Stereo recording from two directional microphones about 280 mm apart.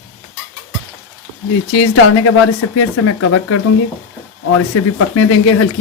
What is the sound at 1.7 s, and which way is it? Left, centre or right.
Speech, left.